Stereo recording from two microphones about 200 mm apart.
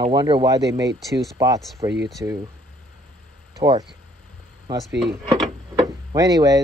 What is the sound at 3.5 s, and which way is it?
Speech, 20° right (ahead or behind).